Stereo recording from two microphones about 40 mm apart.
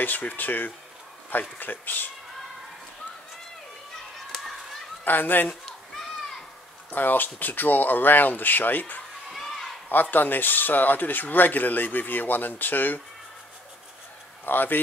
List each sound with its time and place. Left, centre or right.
0.0 s speech: left
5.0 s speech: left
6.9 s speech: left
10.1 s speech: left
14.4 s a man's voice: left